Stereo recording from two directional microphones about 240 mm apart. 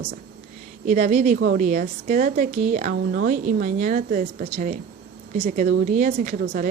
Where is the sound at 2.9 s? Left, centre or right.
Right.